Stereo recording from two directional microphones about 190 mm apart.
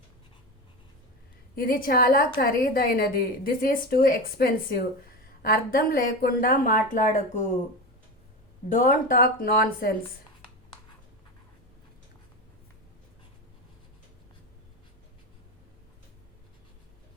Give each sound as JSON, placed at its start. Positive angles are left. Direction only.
{"t": 1.5, "sound": "a woman's voice", "side_deg": 50}
{"t": 8.7, "sound": "a woman's voice", "side_deg": 45}